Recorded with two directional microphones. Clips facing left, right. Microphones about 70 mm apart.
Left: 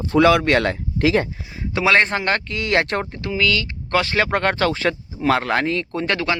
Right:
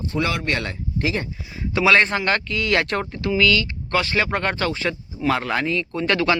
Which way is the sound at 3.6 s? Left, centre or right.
Left.